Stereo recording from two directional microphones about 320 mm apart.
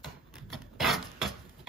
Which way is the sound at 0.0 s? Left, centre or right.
Centre.